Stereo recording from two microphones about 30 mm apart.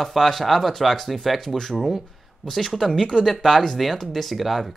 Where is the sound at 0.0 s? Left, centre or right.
Centre.